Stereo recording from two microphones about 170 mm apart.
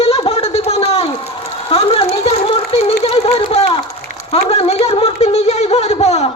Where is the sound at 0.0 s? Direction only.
35° left (ahead or behind).